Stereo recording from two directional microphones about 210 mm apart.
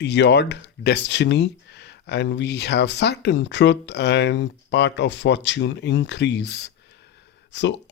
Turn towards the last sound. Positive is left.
turn(degrees=55)  # may be behind; listen again after turning